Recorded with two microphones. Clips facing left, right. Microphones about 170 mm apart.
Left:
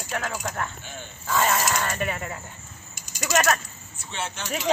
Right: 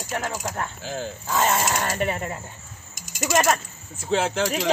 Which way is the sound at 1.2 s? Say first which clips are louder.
Even; 20° right (ahead or behind).